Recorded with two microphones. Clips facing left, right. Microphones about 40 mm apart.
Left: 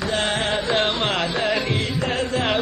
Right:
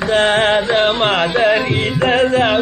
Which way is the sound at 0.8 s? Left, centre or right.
Right.